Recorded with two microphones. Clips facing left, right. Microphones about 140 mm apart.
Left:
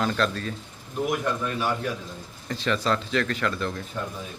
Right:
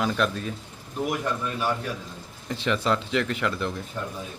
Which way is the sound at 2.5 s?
20° right (ahead or behind).